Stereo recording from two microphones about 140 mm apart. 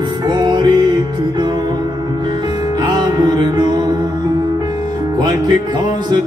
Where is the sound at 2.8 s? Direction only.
30° right (ahead or behind).